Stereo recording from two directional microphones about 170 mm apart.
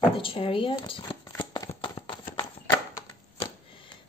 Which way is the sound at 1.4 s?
30° left (ahead or behind).